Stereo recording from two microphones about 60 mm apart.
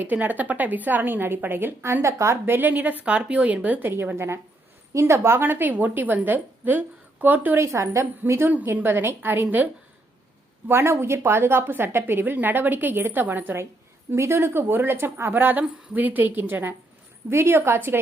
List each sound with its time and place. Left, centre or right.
0.0 s a woman's voice: right
2.5 s a woman's voice: right
4.9 s a woman's voice: right
7.6 s a woman's voice: right
8.4 s a woman's voice: right
10.7 s a woman's voice: right
14.1 s a woman's voice: right